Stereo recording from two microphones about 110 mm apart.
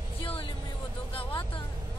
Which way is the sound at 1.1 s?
55° left (ahead or behind).